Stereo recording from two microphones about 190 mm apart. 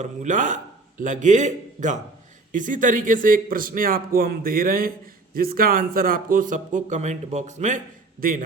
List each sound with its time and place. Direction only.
0.0 s a man's voice: 40° right (ahead or behind)
8.2 s speech: 50° right (ahead or behind)